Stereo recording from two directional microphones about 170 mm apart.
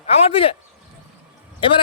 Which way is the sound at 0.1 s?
35° left (ahead or behind).